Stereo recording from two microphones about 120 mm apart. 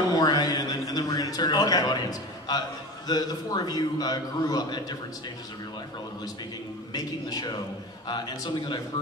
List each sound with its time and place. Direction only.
0.1 s a sound: 35° left (ahead or behind)
3.1 s a man's voice: 35° left (ahead or behind)
6.9 s a man's voice: 35° left (ahead or behind)